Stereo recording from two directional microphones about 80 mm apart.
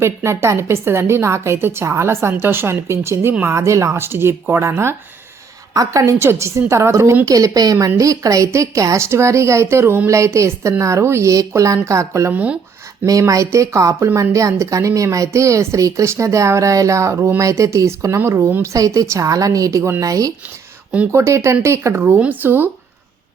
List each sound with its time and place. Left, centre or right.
0.0 s speech: right
5.7 s a woman's voice: right
12.3 s speech: centre
13.1 s a woman's voice: right
18.7 s a woman's voice: right
21.1 s speech: right